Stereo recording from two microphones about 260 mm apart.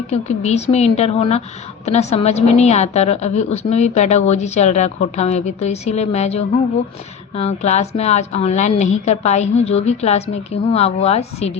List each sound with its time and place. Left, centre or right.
0.1 s a woman's voice: left